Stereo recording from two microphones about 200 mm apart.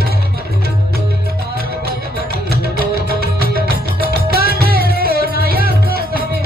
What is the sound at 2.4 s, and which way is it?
Music, 50° right (ahead or behind).